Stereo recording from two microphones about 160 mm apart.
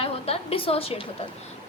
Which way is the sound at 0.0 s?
35° left (ahead or behind).